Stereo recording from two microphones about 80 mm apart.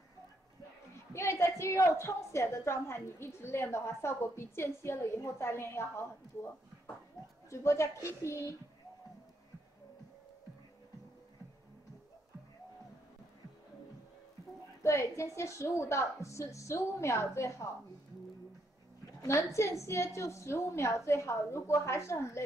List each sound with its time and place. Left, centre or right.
1.1 s a woman's voice: left
14.8 s a woman's voice: left
19.2 s a woman's voice: left